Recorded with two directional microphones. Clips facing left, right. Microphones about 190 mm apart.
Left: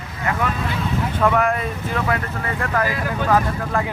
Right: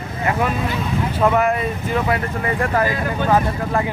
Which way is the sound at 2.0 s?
20° right (ahead or behind).